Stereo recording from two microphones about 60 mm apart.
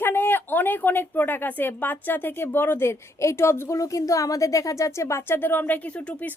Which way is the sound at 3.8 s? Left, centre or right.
Left.